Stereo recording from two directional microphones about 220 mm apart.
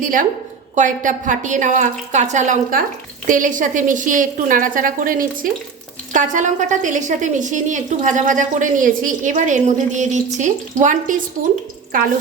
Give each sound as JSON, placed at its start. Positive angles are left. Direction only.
{"t": 0.0, "sound": "a woman's voice", "side_deg": -35}